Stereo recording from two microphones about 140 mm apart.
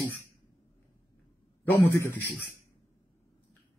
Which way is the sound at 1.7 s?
15° left (ahead or behind).